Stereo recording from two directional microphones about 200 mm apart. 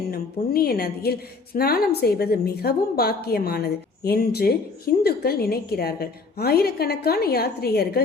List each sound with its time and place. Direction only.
0.1 s a woman's voice: 50° left (ahead or behind)